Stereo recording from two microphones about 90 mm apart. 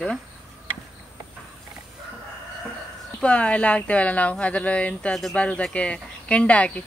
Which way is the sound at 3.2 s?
10° left (ahead or behind).